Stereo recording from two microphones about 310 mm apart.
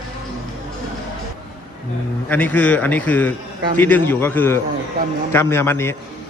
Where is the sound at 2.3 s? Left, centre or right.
Centre.